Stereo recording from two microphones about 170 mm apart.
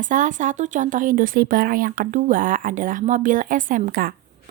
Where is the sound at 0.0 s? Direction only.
50° right (ahead or behind).